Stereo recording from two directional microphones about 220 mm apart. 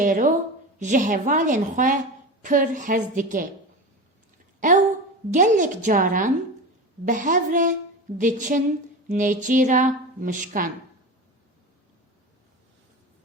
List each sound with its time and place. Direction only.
0.0 s a woman's voice: 35° right (ahead or behind)
4.6 s a woman's voice: 35° right (ahead or behind)